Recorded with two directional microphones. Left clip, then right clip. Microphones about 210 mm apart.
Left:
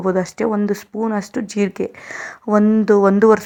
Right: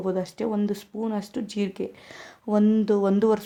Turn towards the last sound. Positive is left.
turn(degrees=20)  # may be behind; listen again after turning